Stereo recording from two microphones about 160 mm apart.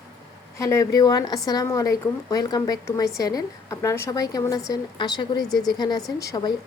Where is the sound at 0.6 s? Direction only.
20° left (ahead or behind).